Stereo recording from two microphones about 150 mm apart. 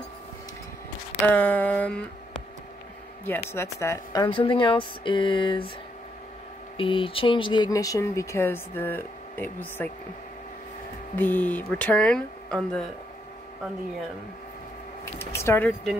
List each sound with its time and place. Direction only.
1.2 s speech: 10° left (ahead or behind)
3.3 s speech: 15° left (ahead or behind); by 5.7 s 35° left (ahead or behind)
6.8 s speech: 35° left (ahead or behind); by 9.8 s 15° left (ahead or behind)
11.1 s speech: 10° left (ahead or behind)
15.1 s speech: 15° left (ahead or behind)